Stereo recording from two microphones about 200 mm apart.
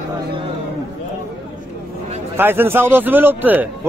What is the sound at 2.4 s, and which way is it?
Speech, 10° right (ahead or behind).